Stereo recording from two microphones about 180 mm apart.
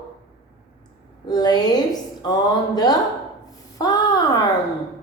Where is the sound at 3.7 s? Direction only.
20° left (ahead or behind).